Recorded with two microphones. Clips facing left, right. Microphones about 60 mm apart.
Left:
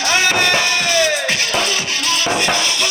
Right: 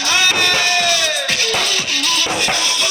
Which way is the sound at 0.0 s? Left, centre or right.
Left.